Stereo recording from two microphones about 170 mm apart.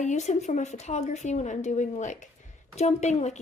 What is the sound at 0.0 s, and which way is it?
Speech, 45° left (ahead or behind).